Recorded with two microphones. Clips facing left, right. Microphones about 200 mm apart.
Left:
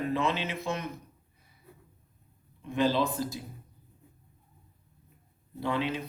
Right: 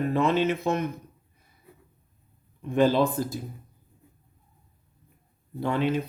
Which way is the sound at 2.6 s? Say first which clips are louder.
Right 5 dB; 55° right (ahead or behind).